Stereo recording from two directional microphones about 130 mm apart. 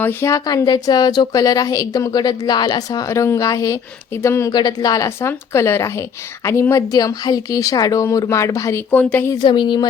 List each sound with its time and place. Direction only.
0.0 s a woman's voice: 15° left (ahead or behind)
4.5 s a woman's voice: 30° left (ahead or behind)
8.9 s speech: 15° left (ahead or behind)
9.3 s speech: 35° left (ahead or behind)